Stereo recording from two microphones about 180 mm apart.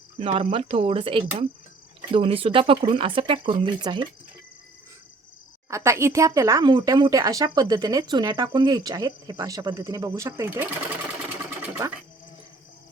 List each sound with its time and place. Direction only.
0.2 s speech: 30° right (ahead or behind)
5.7 s speech: 15° right (ahead or behind)
11.3 s sewing machine: 15° right (ahead or behind)